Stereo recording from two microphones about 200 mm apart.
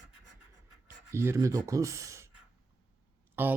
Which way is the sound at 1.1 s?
15° right (ahead or behind).